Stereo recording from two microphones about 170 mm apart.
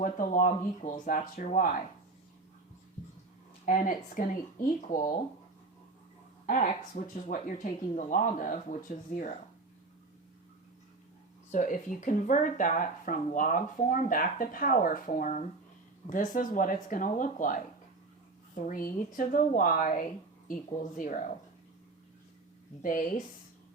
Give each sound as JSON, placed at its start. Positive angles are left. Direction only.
{"t": 0.0, "sound": "speech", "side_deg": 50}
{"t": 3.7, "sound": "speech", "side_deg": 50}
{"t": 6.4, "sound": "speech", "side_deg": 50}
{"t": 11.5, "sound": "speech", "side_deg": 50}
{"t": 22.8, "sound": "speech", "side_deg": 50}